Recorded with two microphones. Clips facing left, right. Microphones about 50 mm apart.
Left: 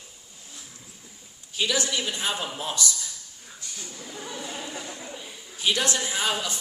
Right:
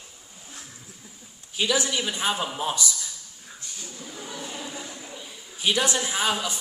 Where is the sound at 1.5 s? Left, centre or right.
Centre.